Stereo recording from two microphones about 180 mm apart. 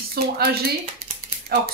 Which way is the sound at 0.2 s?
60° right (ahead or behind).